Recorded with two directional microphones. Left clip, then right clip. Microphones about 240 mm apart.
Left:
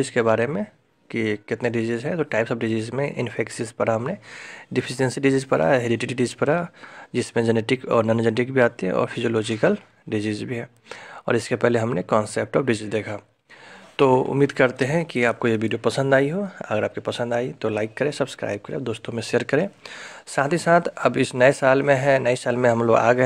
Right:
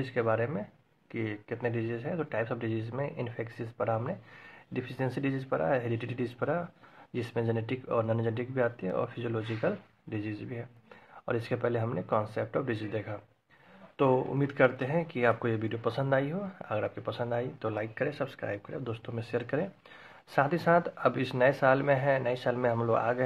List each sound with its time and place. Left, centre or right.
0.0 s speech: left